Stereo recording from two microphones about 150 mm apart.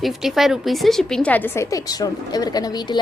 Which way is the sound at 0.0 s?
Centre (ahead or behind).